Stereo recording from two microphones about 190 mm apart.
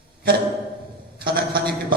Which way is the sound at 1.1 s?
50° right (ahead or behind).